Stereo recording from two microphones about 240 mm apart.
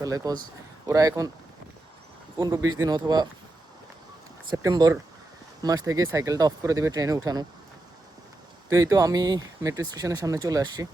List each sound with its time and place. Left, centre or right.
0.0 s speech: centre
2.6 s speech: centre
4.4 s speech: centre
8.7 s speech: centre